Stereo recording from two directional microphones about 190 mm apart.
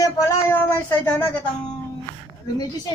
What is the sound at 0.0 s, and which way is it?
Child singing, 15° left (ahead or behind).